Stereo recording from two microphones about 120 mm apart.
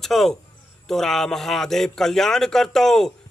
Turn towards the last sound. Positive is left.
turn(degrees=5)  # may be behind; listen again after turning